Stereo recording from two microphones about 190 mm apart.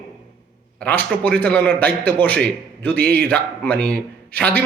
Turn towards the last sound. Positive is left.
turn(degrees=10)  # may be behind; listen again after turning